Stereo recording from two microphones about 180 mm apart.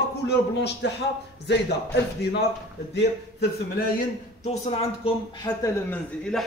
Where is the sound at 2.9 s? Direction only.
60° left (ahead or behind).